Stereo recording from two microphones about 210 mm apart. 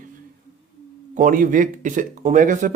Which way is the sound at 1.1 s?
40° right (ahead or behind).